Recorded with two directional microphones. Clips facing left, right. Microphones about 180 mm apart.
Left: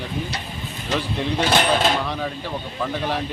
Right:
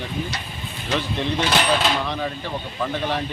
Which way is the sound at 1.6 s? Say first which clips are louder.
Left 1 dB; 45° left (ahead or behind).